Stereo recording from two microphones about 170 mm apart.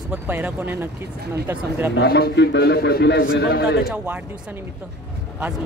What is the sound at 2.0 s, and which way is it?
A man's voice, 70° left (ahead or behind).